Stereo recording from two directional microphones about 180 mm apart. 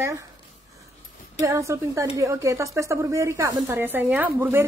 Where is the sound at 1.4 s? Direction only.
15° right (ahead or behind).